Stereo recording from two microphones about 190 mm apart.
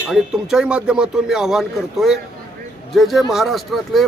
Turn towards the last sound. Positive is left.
turn(degrees=0)  # may be behind; listen again after turning